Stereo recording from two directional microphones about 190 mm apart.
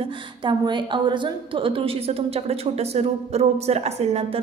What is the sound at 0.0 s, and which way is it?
A woman's voice, 25° right (ahead or behind).